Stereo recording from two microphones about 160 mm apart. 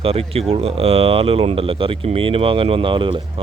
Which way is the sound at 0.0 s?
35° right (ahead or behind).